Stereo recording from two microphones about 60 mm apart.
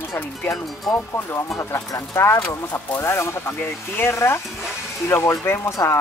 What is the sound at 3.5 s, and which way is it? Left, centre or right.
Speech, left.